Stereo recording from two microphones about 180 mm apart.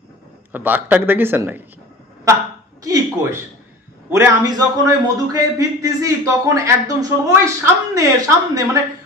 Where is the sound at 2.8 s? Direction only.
20° right (ahead or behind).